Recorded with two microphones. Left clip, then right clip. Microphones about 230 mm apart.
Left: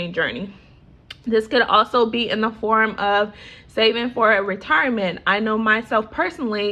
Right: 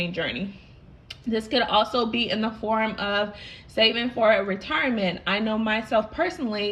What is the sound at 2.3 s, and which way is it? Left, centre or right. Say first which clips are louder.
A woman's voice: left 7 dB; centre.